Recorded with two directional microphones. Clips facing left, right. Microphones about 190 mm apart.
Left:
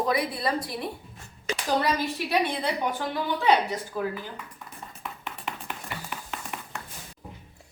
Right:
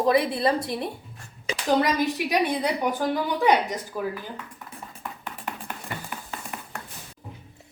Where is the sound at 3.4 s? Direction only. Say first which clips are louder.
Right 1 dB; 15° right (ahead or behind).